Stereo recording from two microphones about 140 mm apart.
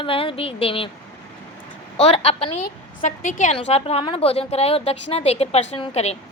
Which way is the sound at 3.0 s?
60° left (ahead or behind).